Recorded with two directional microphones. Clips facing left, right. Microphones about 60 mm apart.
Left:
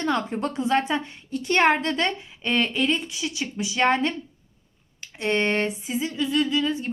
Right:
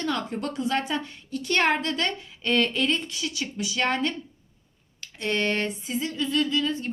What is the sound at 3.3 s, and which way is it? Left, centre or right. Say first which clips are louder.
Speech: left 2 dB; left.